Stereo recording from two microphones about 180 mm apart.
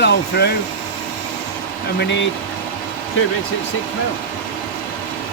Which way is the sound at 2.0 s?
85° left.